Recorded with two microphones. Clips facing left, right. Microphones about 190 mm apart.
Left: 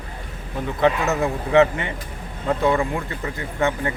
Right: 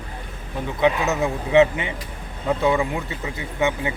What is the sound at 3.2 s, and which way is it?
Speech, 15° right (ahead or behind).